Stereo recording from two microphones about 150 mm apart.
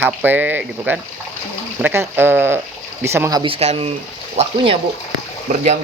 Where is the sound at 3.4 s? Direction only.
40° right (ahead or behind).